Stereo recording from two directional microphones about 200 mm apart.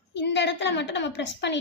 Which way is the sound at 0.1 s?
60° left (ahead or behind).